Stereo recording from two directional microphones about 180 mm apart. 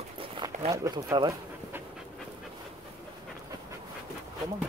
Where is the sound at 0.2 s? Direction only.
30° right (ahead or behind).